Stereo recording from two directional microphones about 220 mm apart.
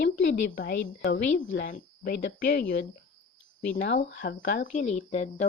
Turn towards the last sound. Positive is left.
turn(degrees=30)  # may be behind; listen again after turning